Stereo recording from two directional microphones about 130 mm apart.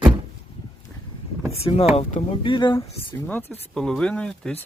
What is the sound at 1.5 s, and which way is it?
Speech, 50° left (ahead or behind).